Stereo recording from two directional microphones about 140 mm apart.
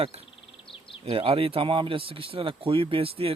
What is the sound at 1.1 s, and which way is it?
Speech, 40° right (ahead or behind).